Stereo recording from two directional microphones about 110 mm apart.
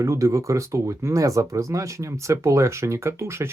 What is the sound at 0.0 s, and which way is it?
Speech, 30° right (ahead or behind).